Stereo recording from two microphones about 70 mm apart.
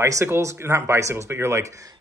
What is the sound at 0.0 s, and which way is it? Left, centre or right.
Speech, right.